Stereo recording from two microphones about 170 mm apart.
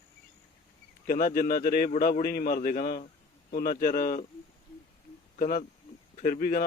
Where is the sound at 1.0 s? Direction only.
55° left (ahead or behind).